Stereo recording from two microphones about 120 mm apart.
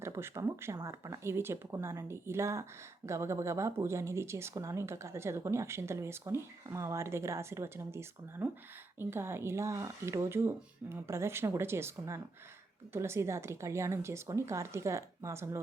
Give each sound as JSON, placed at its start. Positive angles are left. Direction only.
{"t": 0.0, "sound": "speech", "side_deg": -20}